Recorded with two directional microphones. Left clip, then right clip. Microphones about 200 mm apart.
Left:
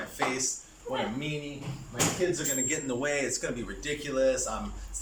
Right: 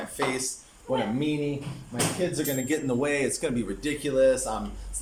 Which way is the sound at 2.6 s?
25° right (ahead or behind).